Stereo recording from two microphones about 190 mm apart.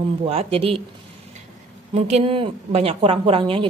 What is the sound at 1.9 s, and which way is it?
A woman's voice, 35° right (ahead or behind).